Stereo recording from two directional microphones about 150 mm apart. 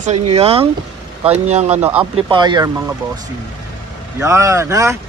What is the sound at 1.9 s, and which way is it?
Speech, 35° right (ahead or behind).